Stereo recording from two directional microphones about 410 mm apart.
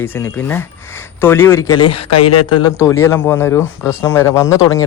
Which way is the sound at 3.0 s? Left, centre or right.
Centre.